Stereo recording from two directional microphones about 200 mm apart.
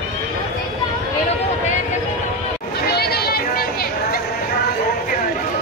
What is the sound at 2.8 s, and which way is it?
Chatter, 55° left (ahead or behind).